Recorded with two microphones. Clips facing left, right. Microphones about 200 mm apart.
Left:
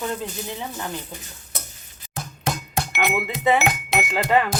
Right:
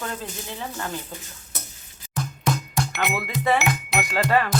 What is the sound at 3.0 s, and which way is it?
Speech, 20° left (ahead or behind).